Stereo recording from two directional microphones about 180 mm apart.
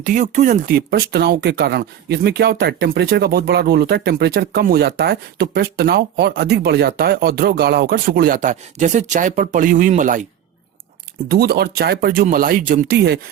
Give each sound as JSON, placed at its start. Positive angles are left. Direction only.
{"t": 0.0, "sound": "speech", "side_deg": -45}
{"t": 11.3, "sound": "speech", "side_deg": -60}